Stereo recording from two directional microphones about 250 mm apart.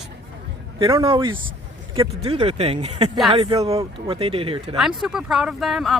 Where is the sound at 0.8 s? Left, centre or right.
Centre.